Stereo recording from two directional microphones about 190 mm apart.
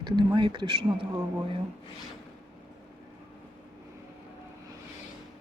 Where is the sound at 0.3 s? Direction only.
25° right (ahead or behind).